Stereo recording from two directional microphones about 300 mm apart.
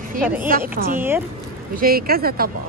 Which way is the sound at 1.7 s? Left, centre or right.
Right.